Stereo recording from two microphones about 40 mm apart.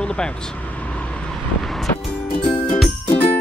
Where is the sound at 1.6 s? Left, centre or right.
Centre.